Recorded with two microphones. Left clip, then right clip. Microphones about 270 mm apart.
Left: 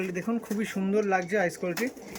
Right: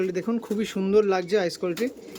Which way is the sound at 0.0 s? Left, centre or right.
Centre.